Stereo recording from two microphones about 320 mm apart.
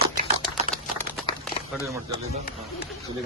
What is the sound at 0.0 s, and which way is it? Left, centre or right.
Typewriter, right.